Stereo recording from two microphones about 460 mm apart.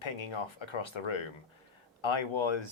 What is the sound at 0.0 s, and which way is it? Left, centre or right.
Speech, left.